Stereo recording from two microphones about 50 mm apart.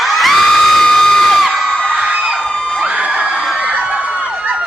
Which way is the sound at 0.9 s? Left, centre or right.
Centre.